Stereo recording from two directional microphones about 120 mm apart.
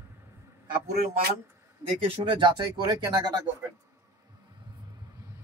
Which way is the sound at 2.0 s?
45° right (ahead or behind).